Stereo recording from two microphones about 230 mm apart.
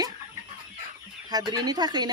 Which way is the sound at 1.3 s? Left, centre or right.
Centre.